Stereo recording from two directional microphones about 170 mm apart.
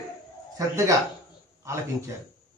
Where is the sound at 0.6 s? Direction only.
20° right (ahead or behind).